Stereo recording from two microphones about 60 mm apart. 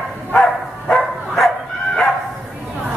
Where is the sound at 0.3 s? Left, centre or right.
Centre.